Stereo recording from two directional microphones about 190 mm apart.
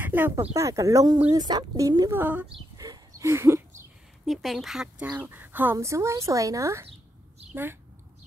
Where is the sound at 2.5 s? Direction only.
20° right (ahead or behind).